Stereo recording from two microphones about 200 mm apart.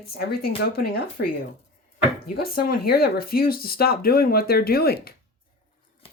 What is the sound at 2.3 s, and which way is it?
Speech, 50° left (ahead or behind).